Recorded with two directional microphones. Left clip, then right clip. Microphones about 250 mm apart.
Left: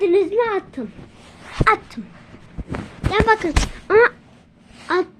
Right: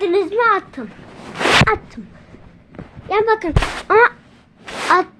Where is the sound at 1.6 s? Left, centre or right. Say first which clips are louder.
Even; left.